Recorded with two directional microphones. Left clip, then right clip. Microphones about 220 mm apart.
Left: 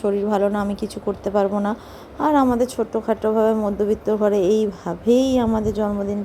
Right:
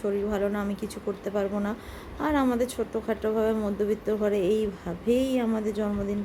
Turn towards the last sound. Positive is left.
turn(degrees=15)  # may be behind; listen again after turning